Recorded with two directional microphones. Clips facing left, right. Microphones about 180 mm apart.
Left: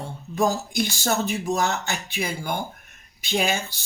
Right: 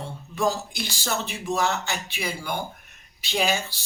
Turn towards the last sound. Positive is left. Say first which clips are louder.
# left 1 dB
turn(degrees=50)  # may be behind; listen again after turning